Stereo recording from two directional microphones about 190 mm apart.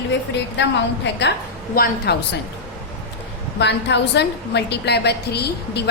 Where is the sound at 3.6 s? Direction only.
65° left (ahead or behind).